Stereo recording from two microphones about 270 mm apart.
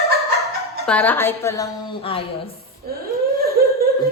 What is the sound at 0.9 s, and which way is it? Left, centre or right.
Speech, centre.